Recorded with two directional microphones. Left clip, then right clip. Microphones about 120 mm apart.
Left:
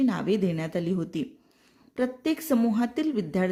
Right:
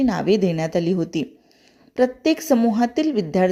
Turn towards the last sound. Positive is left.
turn(degrees=-25)  # may be behind; listen again after turning